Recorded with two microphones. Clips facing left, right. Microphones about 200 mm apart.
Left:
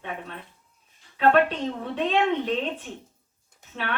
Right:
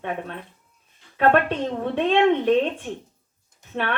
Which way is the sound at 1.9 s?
60° right (ahead or behind).